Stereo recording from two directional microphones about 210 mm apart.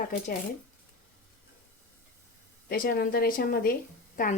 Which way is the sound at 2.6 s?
45° left (ahead or behind).